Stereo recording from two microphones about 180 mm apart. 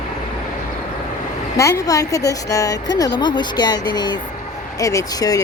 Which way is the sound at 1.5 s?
15° left (ahead or behind).